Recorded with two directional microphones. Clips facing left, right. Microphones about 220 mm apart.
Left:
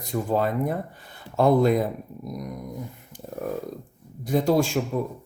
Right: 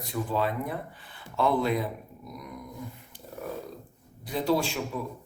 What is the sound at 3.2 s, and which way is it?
Speech, 45° left (ahead or behind).